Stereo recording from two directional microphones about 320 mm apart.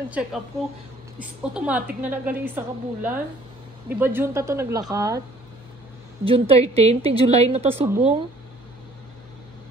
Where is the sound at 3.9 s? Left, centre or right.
Centre.